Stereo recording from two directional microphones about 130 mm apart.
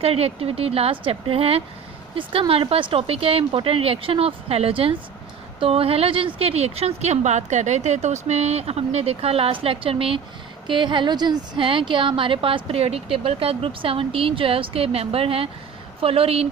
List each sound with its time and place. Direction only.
0.0 s a woman's voice: 50° right (ahead or behind)